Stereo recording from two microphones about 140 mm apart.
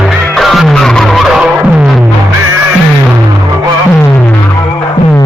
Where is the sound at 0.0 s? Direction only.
Centre (ahead or behind).